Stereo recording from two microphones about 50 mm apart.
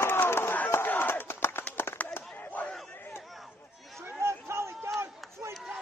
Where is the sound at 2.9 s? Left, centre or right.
Left.